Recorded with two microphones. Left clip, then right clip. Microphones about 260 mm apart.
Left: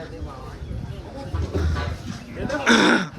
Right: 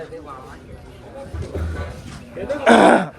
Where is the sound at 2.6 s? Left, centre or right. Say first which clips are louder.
Right 6 dB; centre.